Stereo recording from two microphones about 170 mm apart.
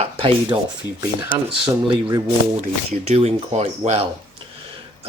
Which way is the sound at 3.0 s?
40° right (ahead or behind).